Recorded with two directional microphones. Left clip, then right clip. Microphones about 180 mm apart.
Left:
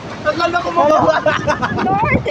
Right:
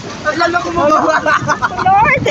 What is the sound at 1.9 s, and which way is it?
Vehicle, 30° right (ahead or behind).